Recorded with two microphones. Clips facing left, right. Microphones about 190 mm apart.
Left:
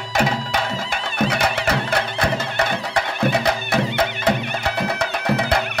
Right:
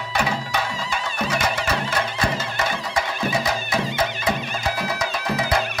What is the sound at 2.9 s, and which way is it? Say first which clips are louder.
Music: left 4 dB; 65° left (ahead or behind).